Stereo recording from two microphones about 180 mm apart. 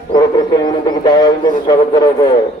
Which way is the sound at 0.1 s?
20° left (ahead or behind).